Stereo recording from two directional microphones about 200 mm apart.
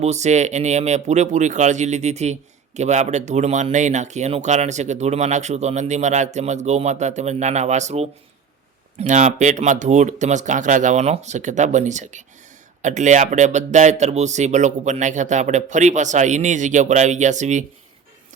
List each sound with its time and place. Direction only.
0.0 s speech: 35° right (ahead or behind)